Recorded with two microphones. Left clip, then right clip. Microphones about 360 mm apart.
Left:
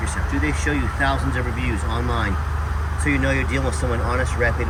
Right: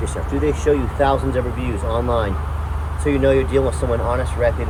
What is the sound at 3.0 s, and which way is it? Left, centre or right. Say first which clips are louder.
Speech: right 5 dB; right.